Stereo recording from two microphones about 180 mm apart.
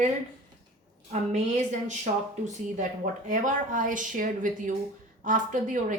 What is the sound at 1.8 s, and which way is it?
Speech, 40° right (ahead or behind).